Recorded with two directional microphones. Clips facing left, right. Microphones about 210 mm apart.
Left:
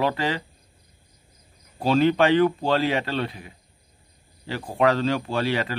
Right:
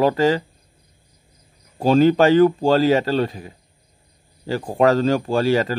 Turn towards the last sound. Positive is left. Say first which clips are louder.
# right 7 dB
turn(degrees=-40)  # may be behind; listen again after turning